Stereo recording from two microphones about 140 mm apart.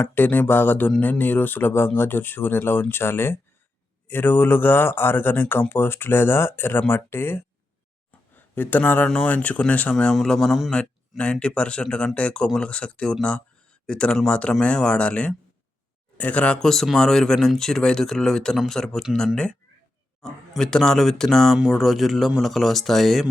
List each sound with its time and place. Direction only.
0.0 s speech: 15° left (ahead or behind)